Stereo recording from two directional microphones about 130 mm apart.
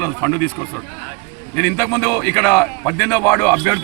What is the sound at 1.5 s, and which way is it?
A man's voice, 20° left (ahead or behind).